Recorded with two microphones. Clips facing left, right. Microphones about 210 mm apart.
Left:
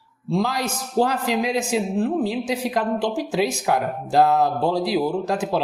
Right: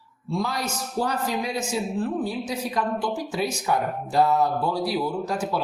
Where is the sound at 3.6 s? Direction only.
80° left.